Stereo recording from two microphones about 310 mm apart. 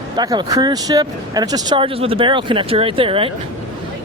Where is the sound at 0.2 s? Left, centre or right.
Centre.